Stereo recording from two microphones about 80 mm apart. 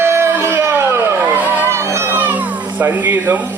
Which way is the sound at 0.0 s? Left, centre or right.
Right.